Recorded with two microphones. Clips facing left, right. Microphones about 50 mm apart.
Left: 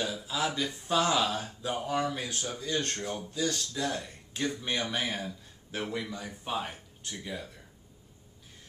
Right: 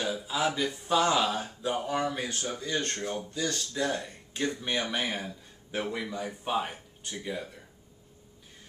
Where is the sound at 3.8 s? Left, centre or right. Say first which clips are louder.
Right 2 dB; centre.